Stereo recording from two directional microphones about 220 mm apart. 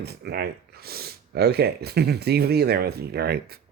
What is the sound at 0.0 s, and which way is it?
Speech, 45° right (ahead or behind).